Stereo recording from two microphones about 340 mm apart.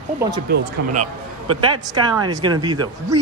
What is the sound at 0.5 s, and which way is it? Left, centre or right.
Speech, right.